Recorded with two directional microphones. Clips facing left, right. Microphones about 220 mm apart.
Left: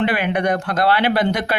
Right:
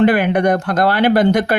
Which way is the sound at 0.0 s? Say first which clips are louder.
Right 6 dB; 45° right (ahead or behind).